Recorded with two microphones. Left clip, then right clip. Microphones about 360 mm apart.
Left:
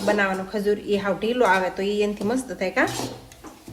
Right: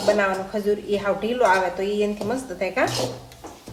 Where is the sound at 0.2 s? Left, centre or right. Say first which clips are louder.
Right 1 dB; left.